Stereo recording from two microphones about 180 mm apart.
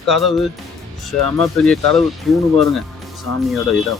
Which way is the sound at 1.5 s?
5° left (ahead or behind).